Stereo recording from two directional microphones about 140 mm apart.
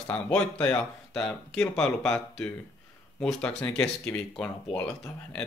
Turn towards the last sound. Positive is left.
turn(degrees=10)  # may be behind; listen again after turning